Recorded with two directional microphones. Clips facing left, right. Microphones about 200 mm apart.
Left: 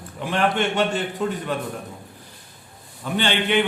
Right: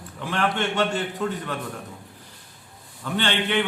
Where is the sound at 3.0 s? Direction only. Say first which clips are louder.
Left 2 dB; 15° left (ahead or behind).